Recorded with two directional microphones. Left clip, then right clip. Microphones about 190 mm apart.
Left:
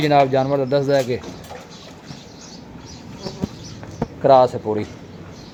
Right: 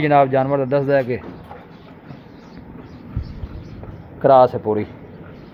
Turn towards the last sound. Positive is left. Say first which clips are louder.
# right 2 dB
turn(degrees=10)  # may be behind; listen again after turning